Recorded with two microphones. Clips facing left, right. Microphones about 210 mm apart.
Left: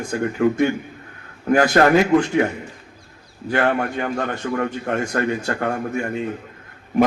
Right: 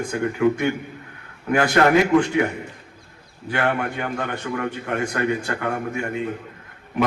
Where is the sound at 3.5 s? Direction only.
45° left (ahead or behind).